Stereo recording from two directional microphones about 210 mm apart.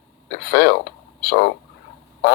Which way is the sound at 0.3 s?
45° left (ahead or behind).